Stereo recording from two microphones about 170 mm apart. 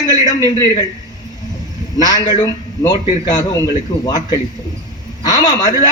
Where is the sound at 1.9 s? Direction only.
25° left (ahead or behind).